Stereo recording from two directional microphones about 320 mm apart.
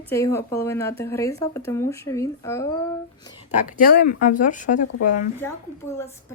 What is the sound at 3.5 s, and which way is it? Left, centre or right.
Speech, left.